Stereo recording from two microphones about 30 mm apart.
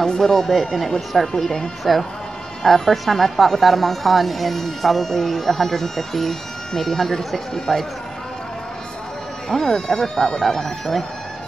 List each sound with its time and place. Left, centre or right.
0.2 s speech: centre
1.9 s speech: centre
7.7 s speech: centre
9.5 s speech: centre